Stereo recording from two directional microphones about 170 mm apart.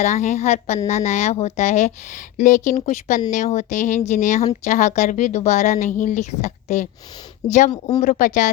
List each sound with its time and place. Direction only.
0.0 s a woman's voice: 45° left (ahead or behind)
7.7 s speech: 25° left (ahead or behind)
8.2 s a woman's voice: 50° left (ahead or behind)